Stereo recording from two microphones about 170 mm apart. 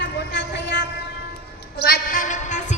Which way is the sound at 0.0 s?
90° left.